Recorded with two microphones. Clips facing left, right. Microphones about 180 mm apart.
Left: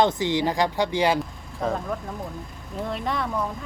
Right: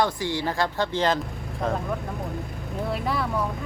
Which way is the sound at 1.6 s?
Centre (ahead or behind).